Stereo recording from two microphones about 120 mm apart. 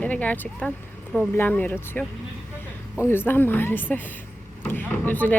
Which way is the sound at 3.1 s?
15° left (ahead or behind).